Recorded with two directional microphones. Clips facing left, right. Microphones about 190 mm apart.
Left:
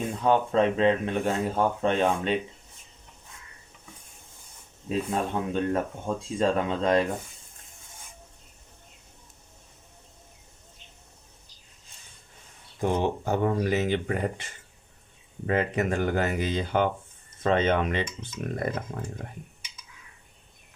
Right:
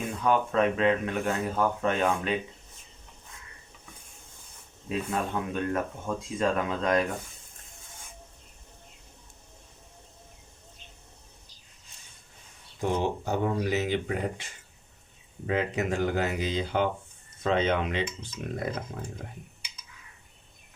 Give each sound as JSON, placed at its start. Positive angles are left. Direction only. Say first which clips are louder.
{"t": 0.0, "sound": "speech", "louder": "left 2 dB", "side_deg": 30}
{"t": 4.9, "sound": "speech", "louder": "left 2 dB", "side_deg": 30}
{"t": 12.8, "sound": "speech", "louder": "left 2 dB", "side_deg": 50}